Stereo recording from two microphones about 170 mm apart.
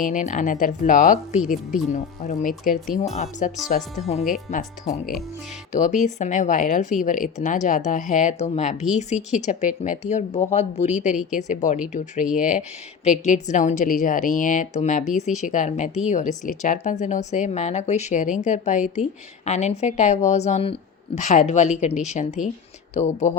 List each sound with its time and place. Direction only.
0.0 s a woman's voice: 50° left (ahead or behind)